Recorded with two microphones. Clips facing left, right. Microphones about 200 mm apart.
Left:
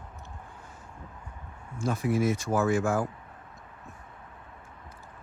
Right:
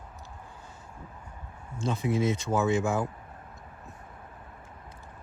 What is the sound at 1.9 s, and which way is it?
Speech, 20° right (ahead or behind).